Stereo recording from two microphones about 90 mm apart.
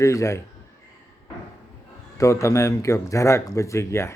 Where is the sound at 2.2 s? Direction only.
35° left (ahead or behind).